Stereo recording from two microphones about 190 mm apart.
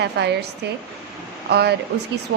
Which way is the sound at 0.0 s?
65° right (ahead or behind).